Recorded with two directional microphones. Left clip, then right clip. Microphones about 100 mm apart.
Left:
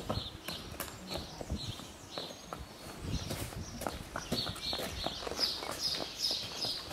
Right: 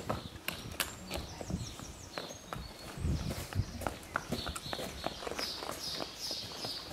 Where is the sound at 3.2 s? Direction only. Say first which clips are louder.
Even; centre (ahead or behind).